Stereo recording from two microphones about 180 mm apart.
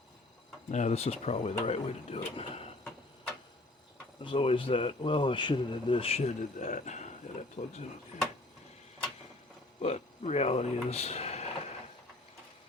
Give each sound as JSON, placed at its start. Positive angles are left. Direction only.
{"t": 0.7, "sound": "speech", "side_deg": 40}
{"t": 4.2, "sound": "speech", "side_deg": 30}
{"t": 9.8, "sound": "speech", "side_deg": 35}